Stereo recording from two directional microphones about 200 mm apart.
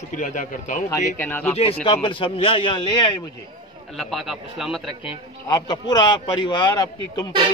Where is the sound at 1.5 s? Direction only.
30° left (ahead or behind).